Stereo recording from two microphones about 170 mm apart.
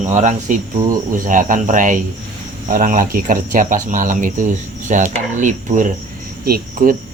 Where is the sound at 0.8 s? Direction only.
20° right (ahead or behind).